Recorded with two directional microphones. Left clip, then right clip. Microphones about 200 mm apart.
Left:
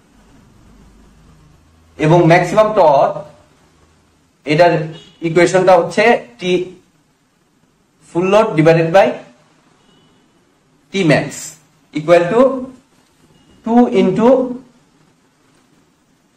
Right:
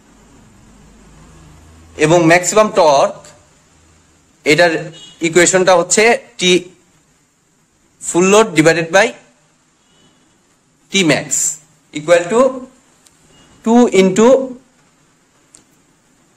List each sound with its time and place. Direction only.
2.0 s a man's voice: 60° right (ahead or behind)
4.4 s a man's voice: 60° right (ahead or behind)
8.1 s a man's voice: 60° right (ahead or behind)
10.9 s speech: 50° right (ahead or behind)
11.9 s a man's voice: 40° right (ahead or behind)
13.7 s a man's voice: 60° right (ahead or behind)